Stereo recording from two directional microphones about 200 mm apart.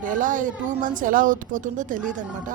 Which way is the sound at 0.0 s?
40° right (ahead or behind).